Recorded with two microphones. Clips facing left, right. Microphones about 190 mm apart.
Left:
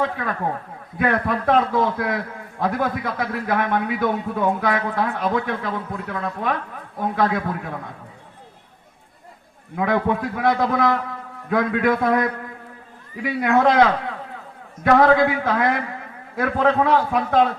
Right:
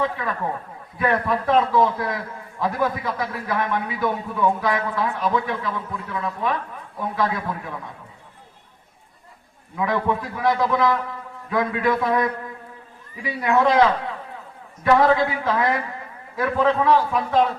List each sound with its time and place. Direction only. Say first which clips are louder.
0.0 s a man's voice: left 1 dB; 50° left (ahead or behind)
9.7 s a man's voice: left 2 dB; 55° left (ahead or behind)
13.2 s a man's voice: left 2 dB; 55° left (ahead or behind)
14.8 s a man's voice: left 2 dB; 55° left (ahead or behind)